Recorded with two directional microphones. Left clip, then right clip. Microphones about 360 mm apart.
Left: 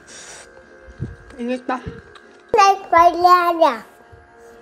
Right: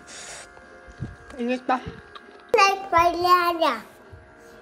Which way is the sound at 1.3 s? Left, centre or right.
Centre.